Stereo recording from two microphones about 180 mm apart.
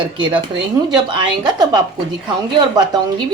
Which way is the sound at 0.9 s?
25° right (ahead or behind).